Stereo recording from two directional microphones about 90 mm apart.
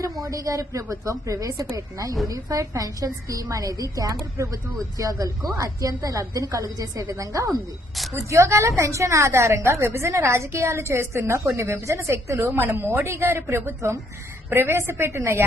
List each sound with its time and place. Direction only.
0.0 s a woman's voice: 35° right (ahead or behind)